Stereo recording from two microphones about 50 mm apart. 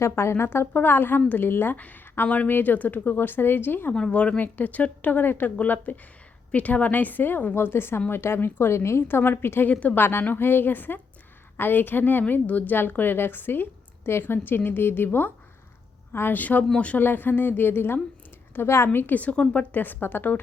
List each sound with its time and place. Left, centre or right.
0.0 s speech: left
0.7 s a woman's voice: left
1.7 s a woman's voice: left
4.1 s a woman's voice: left
9.0 s a woman's voice: left
16.3 s a woman's voice: left
17.0 s a woman's voice: left
18.5 s speech: left
18.9 s a woman's voice: left
19.7 s a woman's voice: left